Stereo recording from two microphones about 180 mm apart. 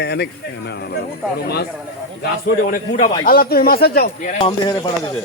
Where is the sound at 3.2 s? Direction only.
55° left (ahead or behind).